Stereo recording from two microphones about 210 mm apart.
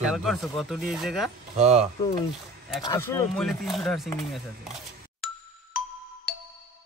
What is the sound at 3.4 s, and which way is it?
Speech, centre (ahead or behind).